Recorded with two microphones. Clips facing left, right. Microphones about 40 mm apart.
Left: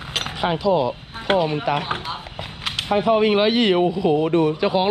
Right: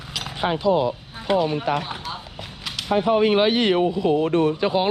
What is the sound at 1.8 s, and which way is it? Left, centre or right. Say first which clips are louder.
Speech: left 3 dB; left.